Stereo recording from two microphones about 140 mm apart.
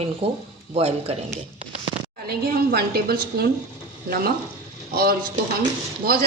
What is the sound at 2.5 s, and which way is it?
Speech, 90° right.